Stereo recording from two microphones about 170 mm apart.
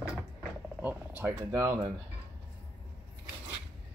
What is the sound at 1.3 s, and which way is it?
Speech, 20° right (ahead or behind).